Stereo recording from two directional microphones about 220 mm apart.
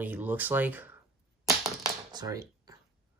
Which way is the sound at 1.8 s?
15° right (ahead or behind).